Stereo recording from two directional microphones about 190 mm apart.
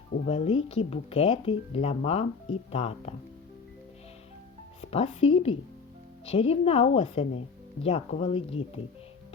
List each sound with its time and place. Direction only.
0.1 s speech: 35° left (ahead or behind)
4.8 s a woman's voice: 30° left (ahead or behind)